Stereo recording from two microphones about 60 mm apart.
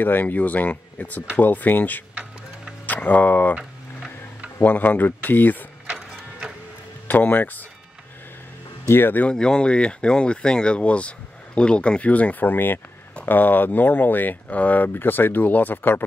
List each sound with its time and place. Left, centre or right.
0.0 s speech: left
4.6 s speech: left
7.1 s speech: left
8.8 s speech: left
9.2 s speech: centre; by 16.0 s left